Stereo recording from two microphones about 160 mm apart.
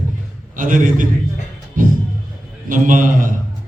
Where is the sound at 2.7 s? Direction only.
55° right (ahead or behind).